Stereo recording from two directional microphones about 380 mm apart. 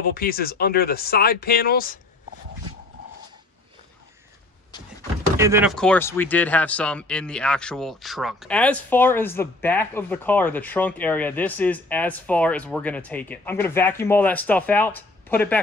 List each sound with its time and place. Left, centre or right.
0.0 s speech: left
5.4 s speech: centre